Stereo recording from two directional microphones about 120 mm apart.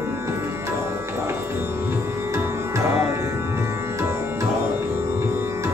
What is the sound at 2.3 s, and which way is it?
Music, 25° right (ahead or behind).